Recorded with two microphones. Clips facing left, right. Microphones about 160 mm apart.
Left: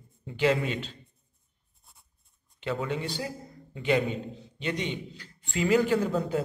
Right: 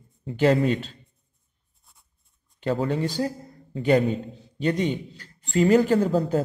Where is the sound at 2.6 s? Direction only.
40° right (ahead or behind).